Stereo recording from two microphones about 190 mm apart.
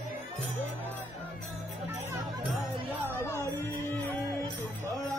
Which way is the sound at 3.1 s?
15° left (ahead or behind).